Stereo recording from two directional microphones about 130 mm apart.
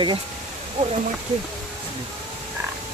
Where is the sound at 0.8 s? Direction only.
60° right (ahead or behind).